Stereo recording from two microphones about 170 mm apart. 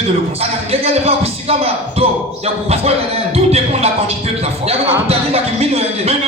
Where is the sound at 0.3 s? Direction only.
35° right (ahead or behind).